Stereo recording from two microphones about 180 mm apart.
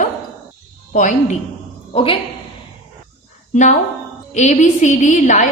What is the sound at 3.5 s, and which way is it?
A woman's voice, 40° left (ahead or behind).